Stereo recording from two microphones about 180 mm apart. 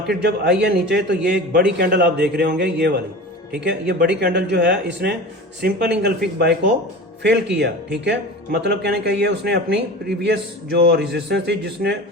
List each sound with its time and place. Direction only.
0.1 s speech: 70° right (ahead or behind)
7.2 s speech: 70° right (ahead or behind)